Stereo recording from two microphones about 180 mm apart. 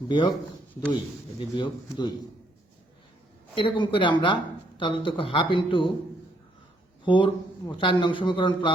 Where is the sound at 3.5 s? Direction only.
25° left (ahead or behind).